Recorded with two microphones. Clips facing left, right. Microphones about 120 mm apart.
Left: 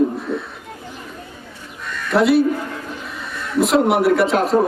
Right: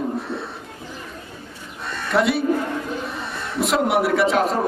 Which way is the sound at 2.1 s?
Centre (ahead or behind).